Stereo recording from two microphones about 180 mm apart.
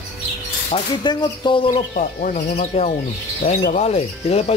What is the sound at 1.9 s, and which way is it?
Speech, 50° left (ahead or behind).